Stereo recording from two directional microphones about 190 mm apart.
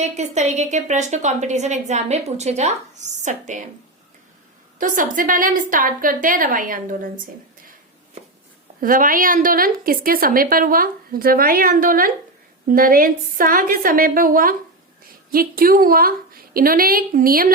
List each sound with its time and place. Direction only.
0.0 s a woman's voice: 35° right (ahead or behind)
4.8 s a woman's voice: 45° right (ahead or behind)
7.6 s a sound: 45° right (ahead or behind)
8.8 s a woman's voice: 45° right (ahead or behind)